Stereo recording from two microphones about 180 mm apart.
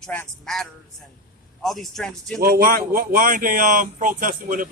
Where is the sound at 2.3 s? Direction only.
55° right (ahead or behind).